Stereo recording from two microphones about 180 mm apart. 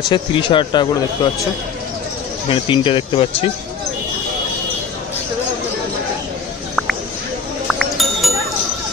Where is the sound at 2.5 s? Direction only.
30° left (ahead or behind).